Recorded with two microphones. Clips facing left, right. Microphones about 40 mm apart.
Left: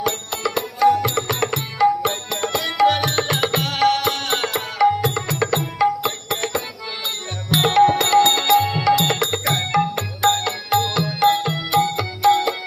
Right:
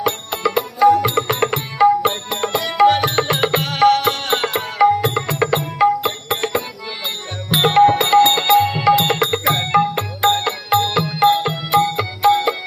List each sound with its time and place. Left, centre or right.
0.0 s music: right
3.6 s music: centre